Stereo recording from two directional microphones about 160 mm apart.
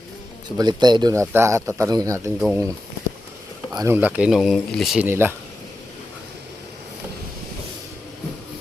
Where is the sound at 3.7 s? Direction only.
25° right (ahead or behind).